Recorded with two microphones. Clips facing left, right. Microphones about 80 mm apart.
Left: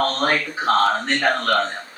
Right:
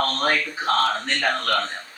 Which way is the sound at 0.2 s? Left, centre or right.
Left.